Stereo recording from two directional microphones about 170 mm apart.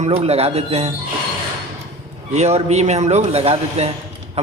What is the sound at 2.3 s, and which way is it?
A man's voice, 40° right (ahead or behind).